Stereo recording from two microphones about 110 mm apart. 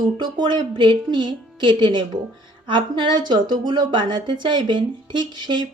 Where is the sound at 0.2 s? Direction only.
40° right (ahead or behind).